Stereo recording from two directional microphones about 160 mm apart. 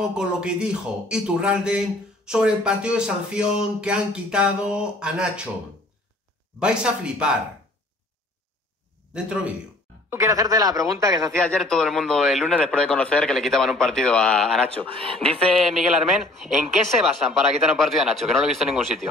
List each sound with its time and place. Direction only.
0.0 s a woman's voice: 5° right (ahead or behind)
6.6 s a woman's voice: 5° right (ahead or behind)
9.1 s a woman's voice: 5° right (ahead or behind)
10.0 s speech: 20° right (ahead or behind)
11.3 s a woman's voice: 5° left (ahead or behind)